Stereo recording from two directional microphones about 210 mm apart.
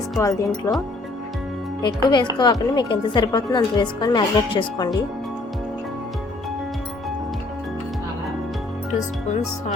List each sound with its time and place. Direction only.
0.2 s speech: 15° left (ahead or behind)
1.8 s speech: 20° left (ahead or behind)